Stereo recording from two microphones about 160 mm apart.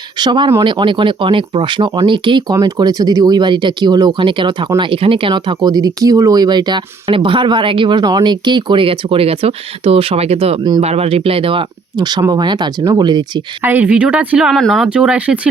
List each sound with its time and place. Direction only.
0.2 s speech: 30° right (ahead or behind)
13.6 s speech: 10° right (ahead or behind)